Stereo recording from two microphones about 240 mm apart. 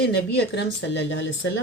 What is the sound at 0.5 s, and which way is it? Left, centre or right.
Speech, left.